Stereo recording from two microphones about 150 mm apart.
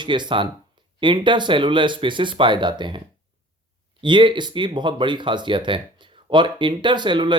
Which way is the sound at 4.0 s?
30° right (ahead or behind).